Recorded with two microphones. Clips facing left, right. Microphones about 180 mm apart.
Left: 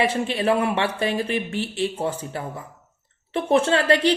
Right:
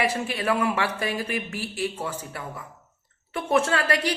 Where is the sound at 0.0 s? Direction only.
25° left (ahead or behind).